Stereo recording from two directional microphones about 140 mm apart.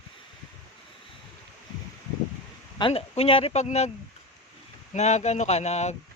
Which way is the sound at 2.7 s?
40° left (ahead or behind).